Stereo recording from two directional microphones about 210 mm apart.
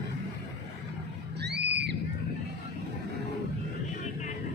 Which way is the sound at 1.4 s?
55° right (ahead or behind).